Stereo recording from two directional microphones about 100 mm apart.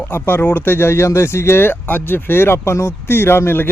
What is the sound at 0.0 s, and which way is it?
Speech, 20° left (ahead or behind).